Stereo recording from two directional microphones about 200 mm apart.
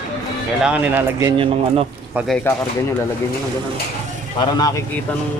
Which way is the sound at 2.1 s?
Centre (ahead or behind).